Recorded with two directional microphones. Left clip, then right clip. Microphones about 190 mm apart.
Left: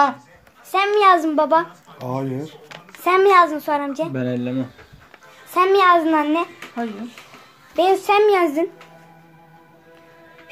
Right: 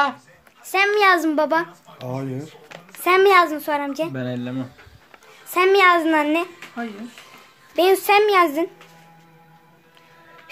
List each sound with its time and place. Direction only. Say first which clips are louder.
0.7 s a child's voice: left 2 dB; 20° right (ahead or behind)
2.0 s speech: left 4 dB; centre (ahead or behind)
3.0 s a child's voice: left 1 dB; 15° right (ahead or behind)
5.5 s a child's voice: left 1 dB; 20° right (ahead or behind)